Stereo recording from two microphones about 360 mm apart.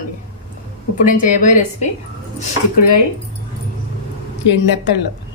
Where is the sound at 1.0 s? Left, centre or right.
Left.